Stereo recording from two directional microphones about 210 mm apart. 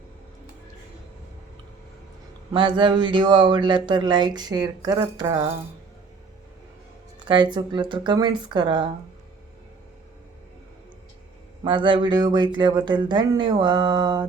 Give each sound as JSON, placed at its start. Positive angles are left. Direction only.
{"t": 2.5, "sound": "speech", "side_deg": -20}
{"t": 7.2, "sound": "speech", "side_deg": -20}
{"t": 11.6, "sound": "speech", "side_deg": -25}